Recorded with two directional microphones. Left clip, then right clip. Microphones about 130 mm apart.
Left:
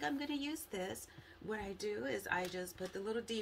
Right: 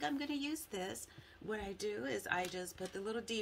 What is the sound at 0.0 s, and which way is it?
Speech, 30° right (ahead or behind).